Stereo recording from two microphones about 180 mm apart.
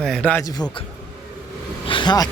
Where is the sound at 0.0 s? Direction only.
5° left (ahead or behind).